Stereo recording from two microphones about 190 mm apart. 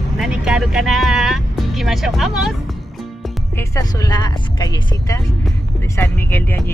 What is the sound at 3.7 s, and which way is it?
Speech, 20° left (ahead or behind).